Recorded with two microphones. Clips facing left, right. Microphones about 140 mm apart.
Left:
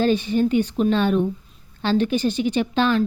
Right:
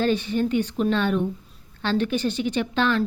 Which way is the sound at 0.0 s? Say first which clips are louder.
Left 3 dB; 20° left (ahead or behind).